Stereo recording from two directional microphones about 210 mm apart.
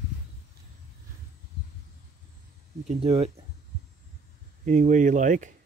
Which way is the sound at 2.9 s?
30° right (ahead or behind).